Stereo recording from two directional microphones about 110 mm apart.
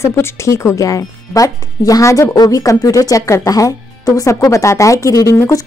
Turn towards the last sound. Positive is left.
turn(degrees=25)  # may be behind; listen again after turning